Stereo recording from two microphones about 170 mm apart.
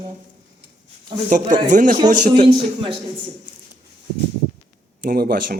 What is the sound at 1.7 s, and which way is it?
Speech, 50° right (ahead or behind).